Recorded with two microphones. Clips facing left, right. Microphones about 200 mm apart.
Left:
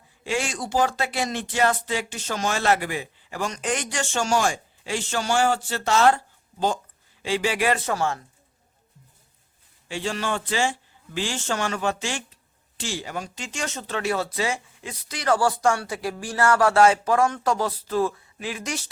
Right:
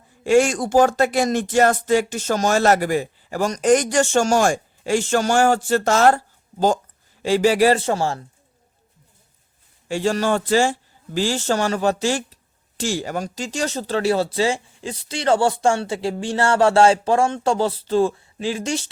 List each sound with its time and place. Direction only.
0.3 s a man's voice: 45° right (ahead or behind); by 8.2 s 30° right (ahead or behind)
9.9 s a man's voice: 45° right (ahead or behind)